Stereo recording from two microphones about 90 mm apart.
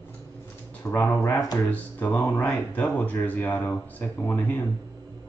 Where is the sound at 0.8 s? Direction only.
20° left (ahead or behind).